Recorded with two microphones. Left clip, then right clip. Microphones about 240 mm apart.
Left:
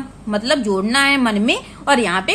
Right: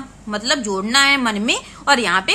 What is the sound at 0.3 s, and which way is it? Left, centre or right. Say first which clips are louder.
A woman's voice: left 2 dB; centre.